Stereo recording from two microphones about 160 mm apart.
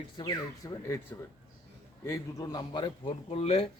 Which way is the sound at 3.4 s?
40° left (ahead or behind).